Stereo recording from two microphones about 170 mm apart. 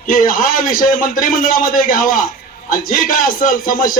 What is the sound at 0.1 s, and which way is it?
A man's voice, 55° left (ahead or behind).